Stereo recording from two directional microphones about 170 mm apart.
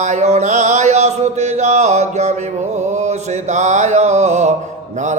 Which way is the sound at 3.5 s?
45° right (ahead or behind).